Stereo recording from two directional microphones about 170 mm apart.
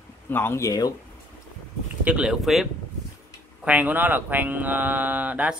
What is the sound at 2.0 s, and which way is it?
Speech, 5° right (ahead or behind).